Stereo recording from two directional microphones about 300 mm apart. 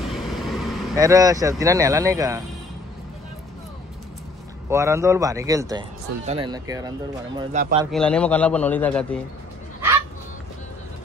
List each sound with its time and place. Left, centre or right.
0.0 s vehicle: centre
0.9 s a man's voice: centre
4.6 s a man's voice: centre
7.5 s speech: right
7.9 s a man's voice: centre